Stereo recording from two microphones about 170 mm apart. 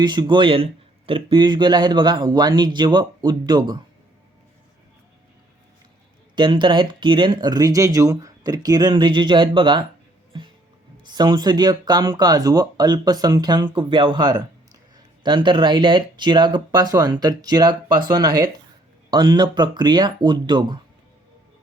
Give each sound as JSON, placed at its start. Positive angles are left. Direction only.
{"t": 0.0, "sound": "speech", "side_deg": -25}
{"t": 6.3, "sound": "speech", "side_deg": -30}
{"t": 10.3, "sound": "music", "side_deg": -30}
{"t": 11.1, "sound": "speech", "side_deg": -25}